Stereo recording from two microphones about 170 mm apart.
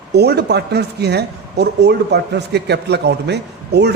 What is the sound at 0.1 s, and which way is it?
Speech, 75° right (ahead or behind).